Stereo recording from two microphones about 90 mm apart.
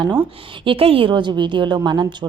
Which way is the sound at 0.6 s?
80° right.